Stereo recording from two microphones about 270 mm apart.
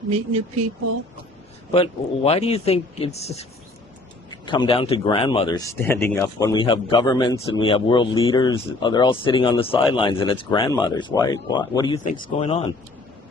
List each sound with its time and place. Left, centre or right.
0.1 s speech: right
1.7 s speech: left
4.4 s speech: centre